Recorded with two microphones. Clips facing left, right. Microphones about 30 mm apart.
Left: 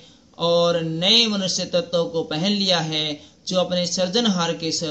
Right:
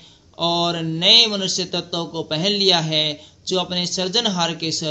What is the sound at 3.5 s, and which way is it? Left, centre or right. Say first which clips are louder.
Speech: left 1 dB; right.